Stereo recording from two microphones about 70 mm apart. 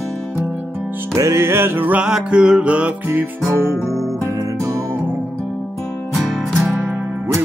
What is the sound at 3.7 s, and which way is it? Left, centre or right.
Music, centre.